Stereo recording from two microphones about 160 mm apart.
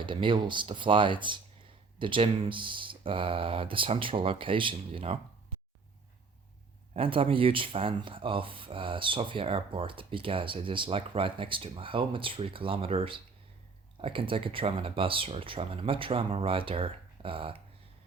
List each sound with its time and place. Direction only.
0.0 s speech: 30° right (ahead or behind)
6.9 s speech: 35° right (ahead or behind)